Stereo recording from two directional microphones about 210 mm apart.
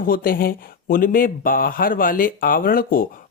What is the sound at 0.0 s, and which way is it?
Speech, 45° left (ahead or behind).